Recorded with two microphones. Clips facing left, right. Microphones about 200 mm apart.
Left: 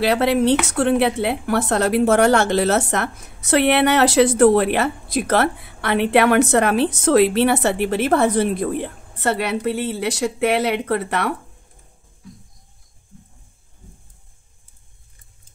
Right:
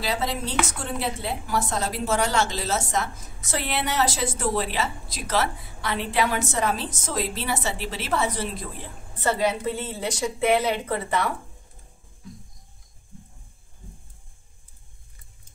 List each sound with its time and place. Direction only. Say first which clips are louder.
0.0 s a woman's voice: left 11 dB; 65° left (ahead or behind)